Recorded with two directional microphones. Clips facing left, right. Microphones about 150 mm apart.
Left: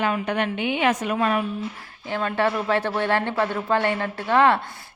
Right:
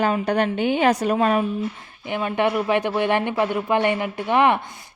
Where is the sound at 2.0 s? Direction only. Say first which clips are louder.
Right 1 dB; 15° right (ahead or behind).